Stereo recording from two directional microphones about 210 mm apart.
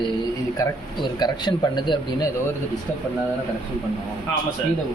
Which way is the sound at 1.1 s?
20° left (ahead or behind).